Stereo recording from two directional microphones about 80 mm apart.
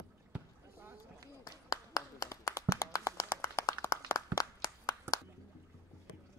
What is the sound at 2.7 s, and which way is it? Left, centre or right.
Clapping, left.